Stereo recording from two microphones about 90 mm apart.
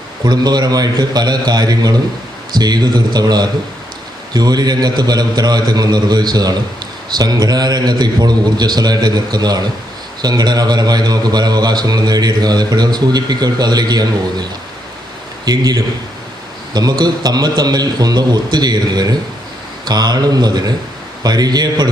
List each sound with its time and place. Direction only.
0.3 s a man's voice: 50° right (ahead or behind)
15.4 s a man's voice: 45° right (ahead or behind)